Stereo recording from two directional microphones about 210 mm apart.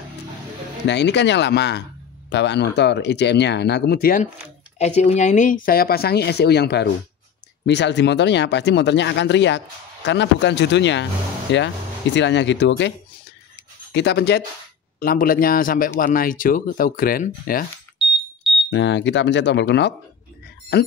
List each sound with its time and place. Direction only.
0.8 s speech: 55° left (ahead or behind)
4.7 s speech: 30° left (ahead or behind); by 12.9 s 55° left (ahead or behind)
13.9 s speech: 50° left (ahead or behind)
17.9 s smoke detector: centre (ahead or behind)
18.7 s speech: 60° left (ahead or behind)